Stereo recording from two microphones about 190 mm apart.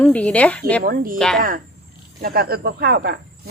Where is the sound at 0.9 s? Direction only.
50° right (ahead or behind).